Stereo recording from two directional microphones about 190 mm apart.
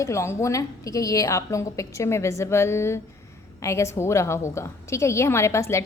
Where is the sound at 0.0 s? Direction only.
15° left (ahead or behind).